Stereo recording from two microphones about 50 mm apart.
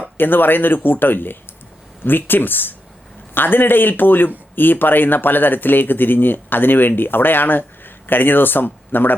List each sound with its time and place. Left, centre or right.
0.2 s speech: left